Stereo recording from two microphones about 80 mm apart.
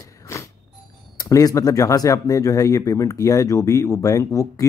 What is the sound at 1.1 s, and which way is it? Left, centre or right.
Speech, left.